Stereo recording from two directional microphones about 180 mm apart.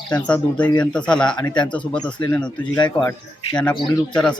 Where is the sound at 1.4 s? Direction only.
25° left (ahead or behind).